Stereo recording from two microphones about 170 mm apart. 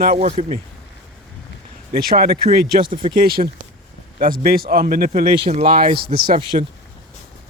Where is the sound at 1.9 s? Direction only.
60° right (ahead or behind).